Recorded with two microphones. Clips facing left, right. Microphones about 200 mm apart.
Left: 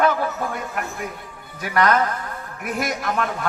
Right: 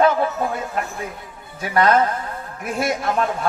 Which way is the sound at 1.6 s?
25° right (ahead or behind).